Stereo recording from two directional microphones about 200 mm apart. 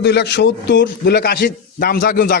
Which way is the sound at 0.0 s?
55° left (ahead or behind).